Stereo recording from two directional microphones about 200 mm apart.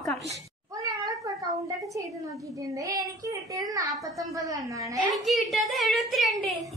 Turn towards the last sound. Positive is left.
turn(degrees=0)  # may be behind; listen again after turning